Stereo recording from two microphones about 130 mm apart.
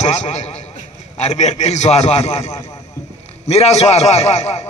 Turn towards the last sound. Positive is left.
turn(degrees=55)  # may be behind; listen again after turning